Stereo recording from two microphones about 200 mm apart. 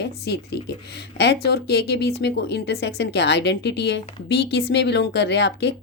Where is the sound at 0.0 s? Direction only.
55° left (ahead or behind).